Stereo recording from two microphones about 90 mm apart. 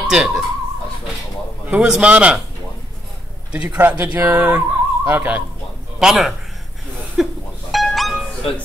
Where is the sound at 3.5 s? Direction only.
15° right (ahead or behind).